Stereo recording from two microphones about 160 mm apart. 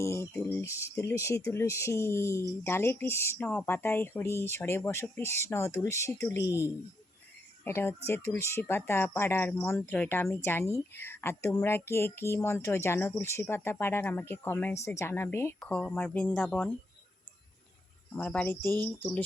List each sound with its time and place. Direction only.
0.0 s speech: 20° left (ahead or behind)
18.2 s speech: 10° left (ahead or behind)